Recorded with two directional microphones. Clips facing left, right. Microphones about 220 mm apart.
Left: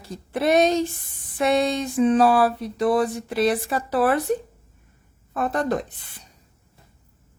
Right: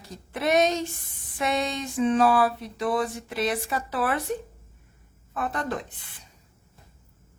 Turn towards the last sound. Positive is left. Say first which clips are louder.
# left 6 dB
turn(degrees=40)  # may be behind; listen again after turning